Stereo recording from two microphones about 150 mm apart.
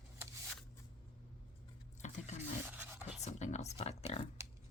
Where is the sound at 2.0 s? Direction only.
50° left (ahead or behind).